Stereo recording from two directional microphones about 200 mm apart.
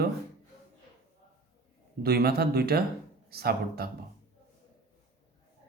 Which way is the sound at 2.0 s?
50° right (ahead or behind).